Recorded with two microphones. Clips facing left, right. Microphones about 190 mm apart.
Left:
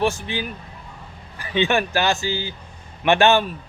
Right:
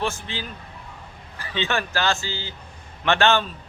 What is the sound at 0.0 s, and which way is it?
A man's voice, 15° left (ahead or behind).